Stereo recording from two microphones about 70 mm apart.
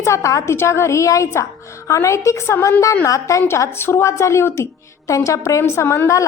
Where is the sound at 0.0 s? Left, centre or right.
Left.